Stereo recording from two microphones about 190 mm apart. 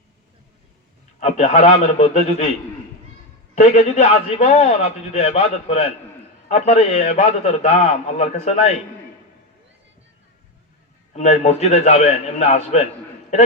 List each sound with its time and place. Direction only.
1.2 s a man's voice: 35° left (ahead or behind)
3.5 s a man's voice: 35° left (ahead or behind)
11.1 s a man's voice: 35° left (ahead or behind)